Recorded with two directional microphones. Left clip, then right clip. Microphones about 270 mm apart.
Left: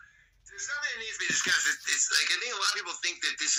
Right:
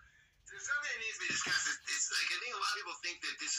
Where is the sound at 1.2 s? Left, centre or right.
Left.